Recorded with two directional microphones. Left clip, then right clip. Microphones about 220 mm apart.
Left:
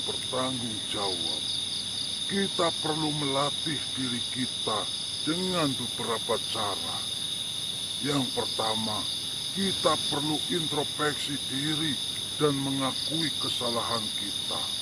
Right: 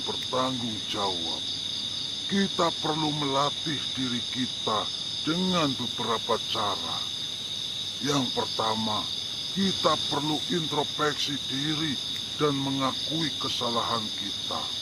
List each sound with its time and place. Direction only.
2.3 s speech: 30° right (ahead or behind)
5.3 s speech: 30° right (ahead or behind)
8.0 s speech: 30° right (ahead or behind)
9.8 s speech: 30° right (ahead or behind)
12.4 s speech: 30° right (ahead or behind)